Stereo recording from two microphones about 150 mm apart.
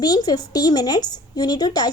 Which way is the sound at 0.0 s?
25° left (ahead or behind).